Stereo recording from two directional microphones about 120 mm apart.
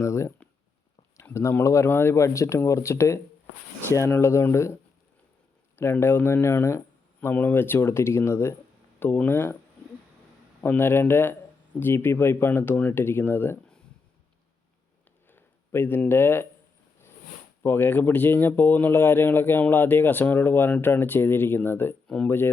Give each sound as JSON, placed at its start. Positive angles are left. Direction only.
{"t": 0.0, "sound": "speech", "side_deg": 25}
{"t": 10.6, "sound": "speech", "side_deg": 15}
{"t": 15.3, "sound": "speech", "side_deg": 20}
{"t": 17.6, "sound": "speech", "side_deg": 20}
{"t": 22.0, "sound": "a sound", "side_deg": 5}